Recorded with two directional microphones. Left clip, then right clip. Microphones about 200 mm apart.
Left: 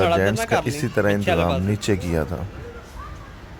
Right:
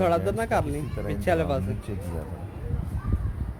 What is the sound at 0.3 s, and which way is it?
Speech, 20° right (ahead or behind).